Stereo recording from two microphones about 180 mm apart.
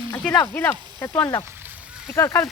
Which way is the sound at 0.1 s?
10° left (ahead or behind).